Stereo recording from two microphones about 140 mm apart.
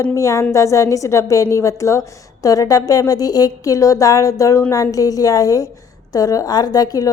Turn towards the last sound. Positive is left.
turn(degrees=25)  # may be behind; listen again after turning